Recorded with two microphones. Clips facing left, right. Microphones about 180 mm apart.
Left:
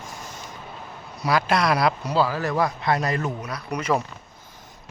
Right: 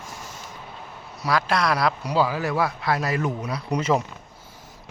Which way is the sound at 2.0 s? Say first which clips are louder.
Even; 10° right (ahead or behind).